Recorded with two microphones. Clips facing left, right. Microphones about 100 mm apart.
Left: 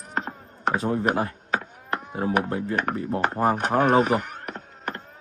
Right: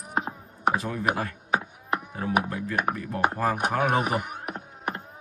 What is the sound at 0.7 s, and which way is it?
Speech, 30° left (ahead or behind).